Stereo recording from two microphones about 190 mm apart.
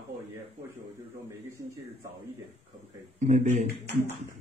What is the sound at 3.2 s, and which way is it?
Speech, 40° right (ahead or behind).